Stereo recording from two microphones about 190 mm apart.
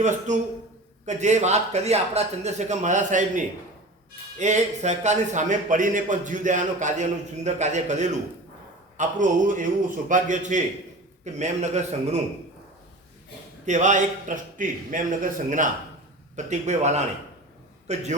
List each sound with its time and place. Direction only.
0.3 s a man's voice: 40° right (ahead or behind)
13.7 s a man's voice: 40° right (ahead or behind)